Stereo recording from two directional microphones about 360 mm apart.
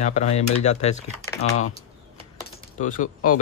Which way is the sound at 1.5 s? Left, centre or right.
Left.